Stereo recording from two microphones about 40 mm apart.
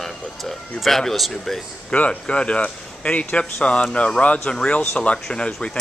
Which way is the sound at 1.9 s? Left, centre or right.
Left.